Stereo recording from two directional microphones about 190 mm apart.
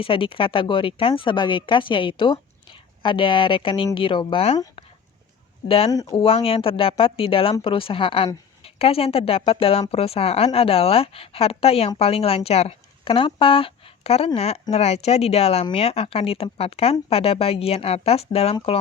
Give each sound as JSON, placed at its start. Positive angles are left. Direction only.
{"t": 0.0, "sound": "speech", "side_deg": 30}
{"t": 5.6, "sound": "a woman's voice", "side_deg": 30}
{"t": 5.9, "sound": "a woman's voice", "side_deg": 20}